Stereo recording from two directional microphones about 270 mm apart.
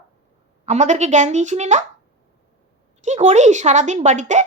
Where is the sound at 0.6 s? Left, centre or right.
Right.